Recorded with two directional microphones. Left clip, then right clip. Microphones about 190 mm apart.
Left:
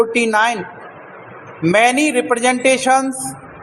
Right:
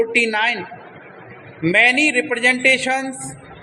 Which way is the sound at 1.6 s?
20° left (ahead or behind).